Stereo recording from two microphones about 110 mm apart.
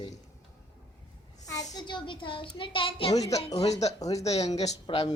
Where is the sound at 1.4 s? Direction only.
35° left (ahead or behind); by 3.1 s 55° left (ahead or behind).